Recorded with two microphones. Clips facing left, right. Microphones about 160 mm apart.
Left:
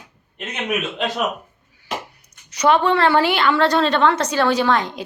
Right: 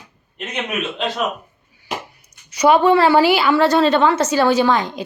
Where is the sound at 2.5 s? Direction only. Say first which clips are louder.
Right 4 dB; 10° right (ahead or behind).